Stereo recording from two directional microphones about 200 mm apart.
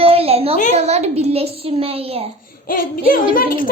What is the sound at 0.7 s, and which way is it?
A child's voice, 30° right (ahead or behind).